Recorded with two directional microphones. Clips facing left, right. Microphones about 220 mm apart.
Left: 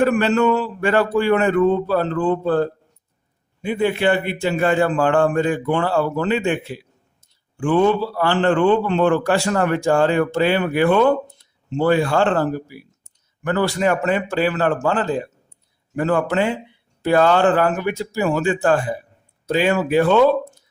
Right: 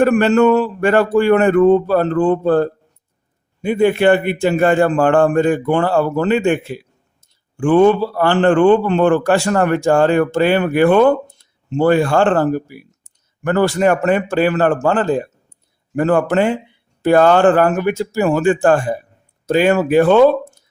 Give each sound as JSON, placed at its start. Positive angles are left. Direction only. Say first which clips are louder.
{"t": 0.0, "sound": "a man's voice", "louder": "right 5 dB", "side_deg": -45}